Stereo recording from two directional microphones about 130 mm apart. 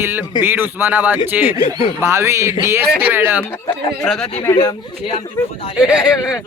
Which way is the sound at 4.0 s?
5° left (ahead or behind).